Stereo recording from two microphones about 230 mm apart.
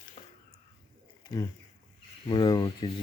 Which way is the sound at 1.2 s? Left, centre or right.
Centre.